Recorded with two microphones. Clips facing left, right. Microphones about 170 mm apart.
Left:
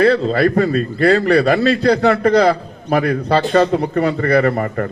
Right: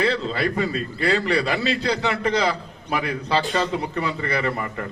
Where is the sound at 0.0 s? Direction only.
45° left (ahead or behind).